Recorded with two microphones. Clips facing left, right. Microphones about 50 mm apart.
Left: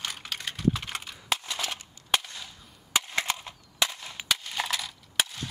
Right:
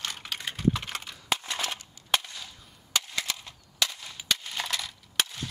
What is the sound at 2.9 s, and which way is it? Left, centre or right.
Cap gun, left.